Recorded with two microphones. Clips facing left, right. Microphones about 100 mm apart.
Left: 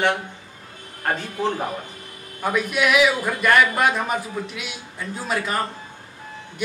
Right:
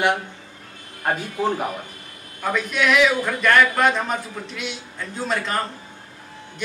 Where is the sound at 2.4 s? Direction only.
10° left (ahead or behind).